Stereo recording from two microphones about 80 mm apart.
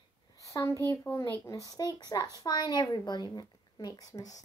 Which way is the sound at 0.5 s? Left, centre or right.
Left.